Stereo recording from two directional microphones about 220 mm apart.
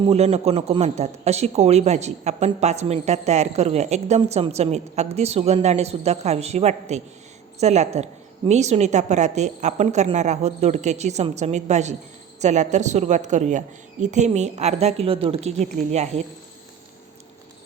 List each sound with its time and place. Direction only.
0.0 s a woman's voice: 30° right (ahead or behind)